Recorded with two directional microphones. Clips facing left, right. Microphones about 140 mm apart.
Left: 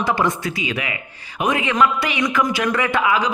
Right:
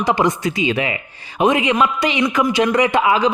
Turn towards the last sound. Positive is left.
turn(degrees=-25)  # may be behind; listen again after turning